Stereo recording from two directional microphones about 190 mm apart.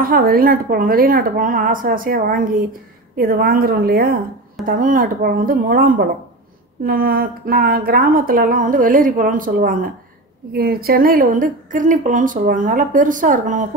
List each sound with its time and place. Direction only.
0.0 s speech: 50° right (ahead or behind)